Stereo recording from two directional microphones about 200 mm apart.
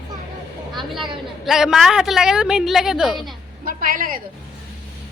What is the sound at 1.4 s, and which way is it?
A woman's voice, centre (ahead or behind).